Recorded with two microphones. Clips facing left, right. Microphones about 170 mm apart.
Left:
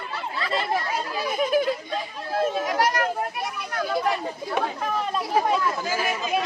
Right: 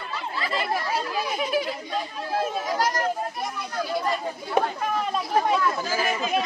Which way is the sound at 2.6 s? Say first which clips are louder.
Left 2 dB; 65° left (ahead or behind).